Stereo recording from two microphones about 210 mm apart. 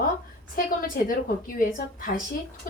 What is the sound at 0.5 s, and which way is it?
A woman's voice, 40° left (ahead or behind).